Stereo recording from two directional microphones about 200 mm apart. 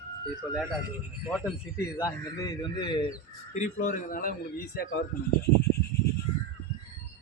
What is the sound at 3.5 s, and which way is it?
Speech, 40° left (ahead or behind).